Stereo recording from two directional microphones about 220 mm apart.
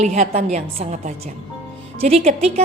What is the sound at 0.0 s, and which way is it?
A woman's voice, 30° right (ahead or behind).